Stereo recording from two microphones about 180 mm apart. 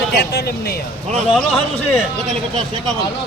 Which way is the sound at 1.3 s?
5° left (ahead or behind).